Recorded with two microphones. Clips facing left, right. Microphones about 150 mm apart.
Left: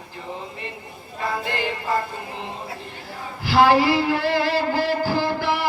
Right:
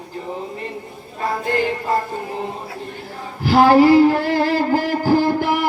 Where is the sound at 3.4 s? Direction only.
45° right (ahead or behind).